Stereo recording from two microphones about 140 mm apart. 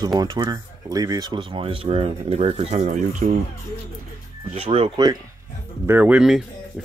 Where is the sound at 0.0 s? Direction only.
30° right (ahead or behind); by 3.3 s 65° right (ahead or behind).